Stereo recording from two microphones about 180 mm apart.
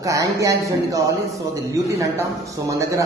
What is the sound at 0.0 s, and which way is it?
A man's voice, 20° right (ahead or behind).